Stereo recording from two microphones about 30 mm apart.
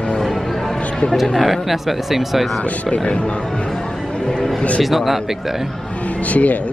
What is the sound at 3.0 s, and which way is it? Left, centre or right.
Speech, left.